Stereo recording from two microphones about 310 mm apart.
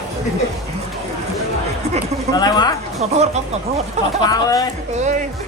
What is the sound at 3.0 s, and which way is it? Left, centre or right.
Speech, right.